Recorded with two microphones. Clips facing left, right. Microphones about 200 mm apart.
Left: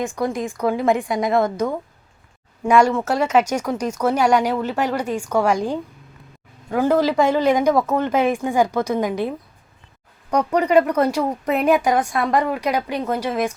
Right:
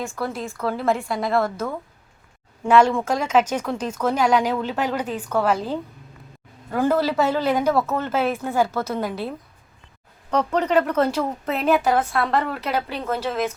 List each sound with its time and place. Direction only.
0.0 s speech: 15° left (ahead or behind)
10.3 s speech: 10° left (ahead or behind)